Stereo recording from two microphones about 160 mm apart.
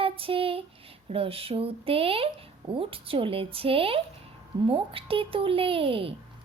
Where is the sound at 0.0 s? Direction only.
35° right (ahead or behind).